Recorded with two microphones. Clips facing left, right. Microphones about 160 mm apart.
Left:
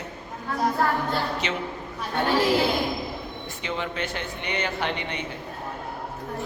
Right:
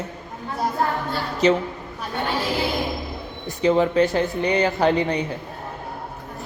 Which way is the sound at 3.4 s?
40° right (ahead or behind).